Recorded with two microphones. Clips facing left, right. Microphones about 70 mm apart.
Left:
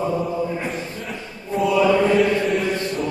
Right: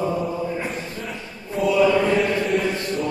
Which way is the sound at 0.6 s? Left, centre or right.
Centre.